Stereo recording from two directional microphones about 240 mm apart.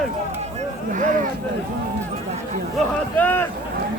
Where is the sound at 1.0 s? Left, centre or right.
Right.